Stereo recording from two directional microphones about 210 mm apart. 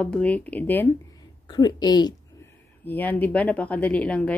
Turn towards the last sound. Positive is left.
turn(degrees=5)  # may be behind; listen again after turning